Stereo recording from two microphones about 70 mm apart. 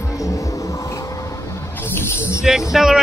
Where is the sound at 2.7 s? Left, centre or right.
Centre.